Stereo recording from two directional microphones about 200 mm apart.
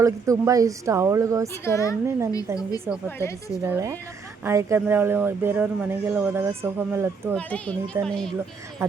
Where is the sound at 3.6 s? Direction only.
15° right (ahead or behind).